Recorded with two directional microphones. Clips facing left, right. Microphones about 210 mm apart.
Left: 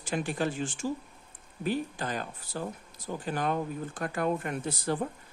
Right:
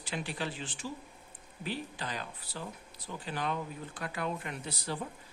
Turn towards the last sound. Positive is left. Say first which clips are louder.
# left 7 dB
turn(degrees=50)  # may be behind; listen again after turning